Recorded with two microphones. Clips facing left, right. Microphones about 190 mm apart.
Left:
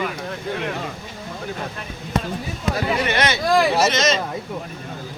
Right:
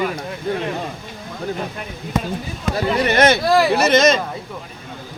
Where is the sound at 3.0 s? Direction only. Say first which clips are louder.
Right 6 dB; 45° right (ahead or behind).